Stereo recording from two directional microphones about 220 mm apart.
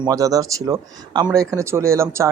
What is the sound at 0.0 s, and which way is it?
Speech, 15° right (ahead or behind).